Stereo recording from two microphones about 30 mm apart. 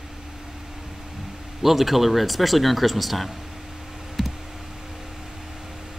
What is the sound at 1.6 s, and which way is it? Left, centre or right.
Speech, centre.